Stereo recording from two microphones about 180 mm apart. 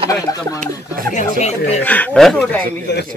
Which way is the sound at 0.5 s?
50° right (ahead or behind).